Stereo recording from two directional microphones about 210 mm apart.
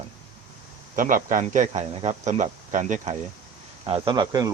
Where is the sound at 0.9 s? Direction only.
40° right (ahead or behind).